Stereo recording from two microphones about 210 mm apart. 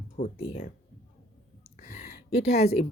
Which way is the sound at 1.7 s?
35° left (ahead or behind).